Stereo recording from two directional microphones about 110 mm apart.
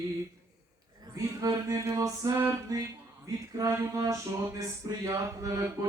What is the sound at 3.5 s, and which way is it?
Mantra, 30° right (ahead or behind).